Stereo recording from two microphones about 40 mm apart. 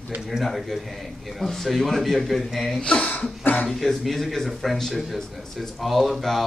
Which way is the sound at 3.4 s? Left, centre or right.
Left.